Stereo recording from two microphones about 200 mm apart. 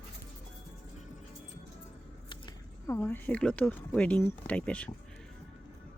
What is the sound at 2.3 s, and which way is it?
Speech, 15° left (ahead or behind).